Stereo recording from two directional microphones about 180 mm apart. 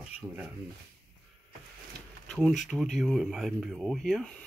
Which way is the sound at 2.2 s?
5° left (ahead or behind).